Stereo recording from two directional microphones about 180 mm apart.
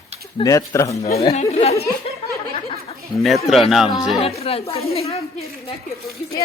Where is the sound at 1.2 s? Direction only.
35° left (ahead or behind).